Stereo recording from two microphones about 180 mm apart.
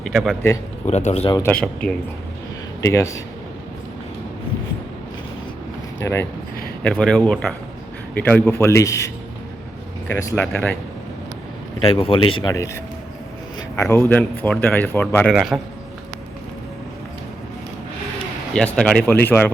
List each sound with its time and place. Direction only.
0.0 s speech: centre (ahead or behind)
0.9 s speech: 40° left (ahead or behind)
1.3 s a man's voice: 15° left (ahead or behind)
1.5 s speech: 5° left (ahead or behind)
2.8 s a man's voice: 15° left (ahead or behind)
6.0 s a man's voice: 15° left (ahead or behind)
11.8 s speech: 30° left (ahead or behind)
13.8 s a man's voice: 10° left (ahead or behind)
18.5 s a man's voice: 5° left (ahead or behind)